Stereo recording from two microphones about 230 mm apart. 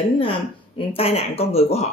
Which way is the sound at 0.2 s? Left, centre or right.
Left.